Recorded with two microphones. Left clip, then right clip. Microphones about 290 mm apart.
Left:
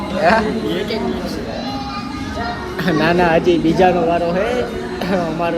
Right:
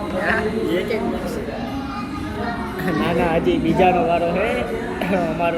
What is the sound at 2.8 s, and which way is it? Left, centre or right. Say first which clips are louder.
Speech: left 6 dB; centre.